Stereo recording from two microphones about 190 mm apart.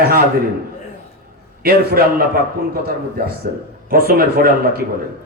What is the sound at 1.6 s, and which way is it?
Music, 50° right (ahead or behind).